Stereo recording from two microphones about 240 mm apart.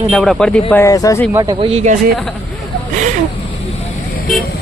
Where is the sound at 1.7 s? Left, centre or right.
Right.